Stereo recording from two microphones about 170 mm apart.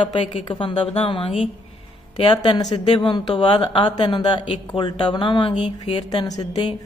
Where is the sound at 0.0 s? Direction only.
35° left (ahead or behind).